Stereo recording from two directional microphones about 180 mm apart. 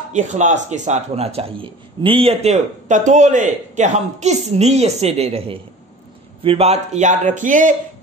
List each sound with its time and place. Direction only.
0.1 s speech: 40° right (ahead or behind)